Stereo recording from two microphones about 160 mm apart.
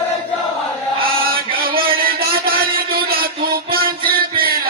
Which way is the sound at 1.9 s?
70° right (ahead or behind).